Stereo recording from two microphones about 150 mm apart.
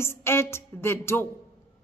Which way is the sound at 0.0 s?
15° left (ahead or behind).